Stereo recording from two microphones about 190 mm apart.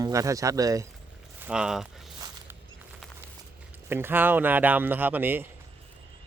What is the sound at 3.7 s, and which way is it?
Speech, 10° right (ahead or behind).